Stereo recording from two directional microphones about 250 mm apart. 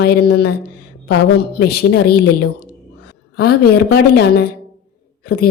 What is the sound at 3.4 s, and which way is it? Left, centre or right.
Speech, left.